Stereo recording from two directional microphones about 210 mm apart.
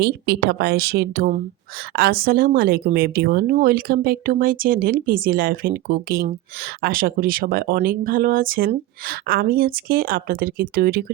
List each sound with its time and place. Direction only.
0.0 s a woman's voice: 50° right (ahead or behind)